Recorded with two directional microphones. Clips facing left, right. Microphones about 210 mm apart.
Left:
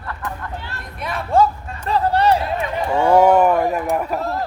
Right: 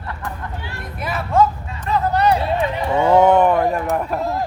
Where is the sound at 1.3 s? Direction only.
30° left (ahead or behind).